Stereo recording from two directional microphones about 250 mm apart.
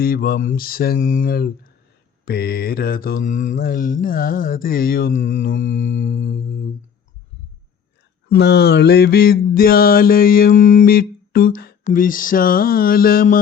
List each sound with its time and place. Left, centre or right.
0.0 s mantra: left
8.3 s mantra: left